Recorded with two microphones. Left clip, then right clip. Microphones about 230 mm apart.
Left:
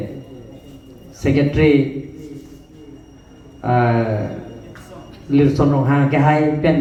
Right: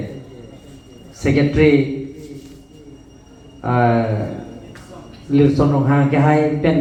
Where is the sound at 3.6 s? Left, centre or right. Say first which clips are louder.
Even; left.